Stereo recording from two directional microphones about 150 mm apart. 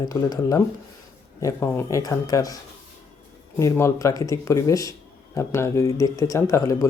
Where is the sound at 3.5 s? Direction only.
20° left (ahead or behind).